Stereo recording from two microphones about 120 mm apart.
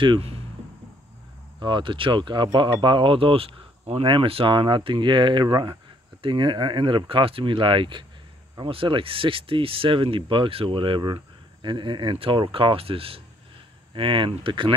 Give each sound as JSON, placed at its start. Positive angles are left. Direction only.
{"t": 0.0, "sound": "speech", "side_deg": -50}
{"t": 1.6, "sound": "speech", "side_deg": -40}